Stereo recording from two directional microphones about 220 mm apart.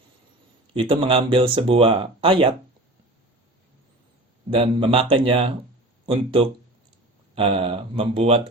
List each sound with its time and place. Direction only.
0.7 s speech: 25° right (ahead or behind)
4.5 s speech: 25° right (ahead or behind)